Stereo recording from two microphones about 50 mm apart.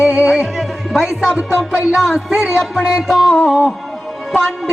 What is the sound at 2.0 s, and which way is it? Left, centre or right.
Music, centre.